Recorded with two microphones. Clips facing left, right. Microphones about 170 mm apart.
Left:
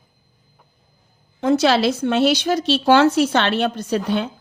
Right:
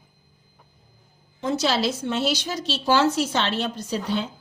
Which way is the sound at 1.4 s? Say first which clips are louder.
Left 7 dB; 60° left (ahead or behind).